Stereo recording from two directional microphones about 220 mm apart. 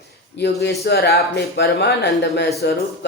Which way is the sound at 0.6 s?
45° left (ahead or behind).